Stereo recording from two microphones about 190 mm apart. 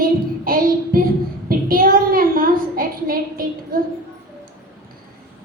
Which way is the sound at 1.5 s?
50° right (ahead or behind).